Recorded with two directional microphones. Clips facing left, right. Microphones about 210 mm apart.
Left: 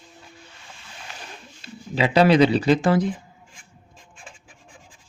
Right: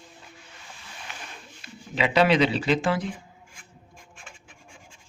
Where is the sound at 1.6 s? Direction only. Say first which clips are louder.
Left 3 dB; 35° left (ahead or behind).